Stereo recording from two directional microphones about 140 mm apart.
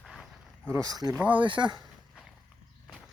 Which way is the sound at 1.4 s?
35° right (ahead or behind).